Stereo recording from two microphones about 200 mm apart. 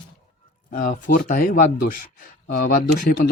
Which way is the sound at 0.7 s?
40° left (ahead or behind).